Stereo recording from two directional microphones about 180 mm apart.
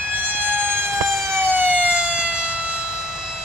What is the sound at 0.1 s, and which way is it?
Emergency vehicle, 10° right (ahead or behind).